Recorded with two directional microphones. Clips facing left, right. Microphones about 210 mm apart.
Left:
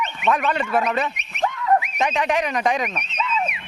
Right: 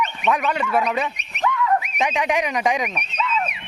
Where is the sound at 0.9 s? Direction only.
10° right (ahead or behind).